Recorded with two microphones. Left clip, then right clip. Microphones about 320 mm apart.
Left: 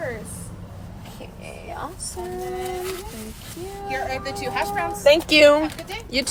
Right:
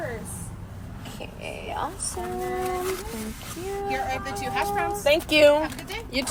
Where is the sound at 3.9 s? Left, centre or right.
Left.